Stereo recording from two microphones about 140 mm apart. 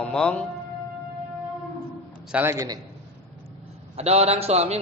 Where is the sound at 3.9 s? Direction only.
50° right (ahead or behind).